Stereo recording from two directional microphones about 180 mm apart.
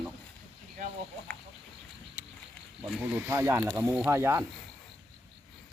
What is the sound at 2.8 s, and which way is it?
Speech, 10° right (ahead or behind).